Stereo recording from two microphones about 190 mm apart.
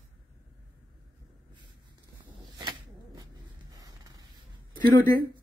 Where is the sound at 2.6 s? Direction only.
25° right (ahead or behind).